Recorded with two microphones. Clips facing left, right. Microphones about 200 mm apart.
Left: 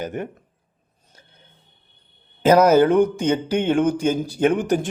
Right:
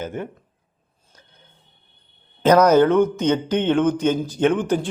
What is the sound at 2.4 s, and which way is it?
Speech, 10° left (ahead or behind).